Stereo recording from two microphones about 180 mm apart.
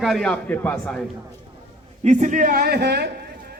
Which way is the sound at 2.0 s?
45° right (ahead or behind).